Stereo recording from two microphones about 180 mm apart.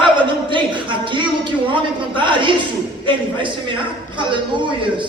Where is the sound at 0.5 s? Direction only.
25° right (ahead or behind).